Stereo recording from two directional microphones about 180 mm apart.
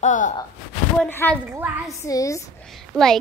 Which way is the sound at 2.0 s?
15° left (ahead or behind).